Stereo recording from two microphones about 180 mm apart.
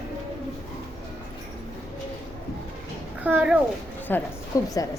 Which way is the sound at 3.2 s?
10° right (ahead or behind).